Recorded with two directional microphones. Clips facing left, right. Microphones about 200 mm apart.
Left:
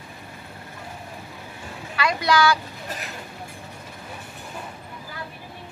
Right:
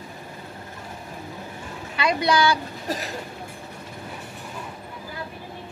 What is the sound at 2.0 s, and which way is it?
Speech, 20° right (ahead or behind).